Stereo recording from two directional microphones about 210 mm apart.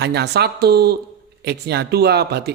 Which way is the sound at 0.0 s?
50° right (ahead or behind).